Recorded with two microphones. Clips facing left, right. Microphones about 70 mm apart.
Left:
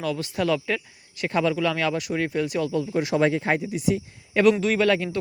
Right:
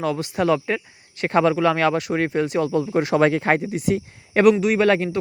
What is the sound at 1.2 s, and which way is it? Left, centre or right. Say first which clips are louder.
Speech: right 5 dB; right.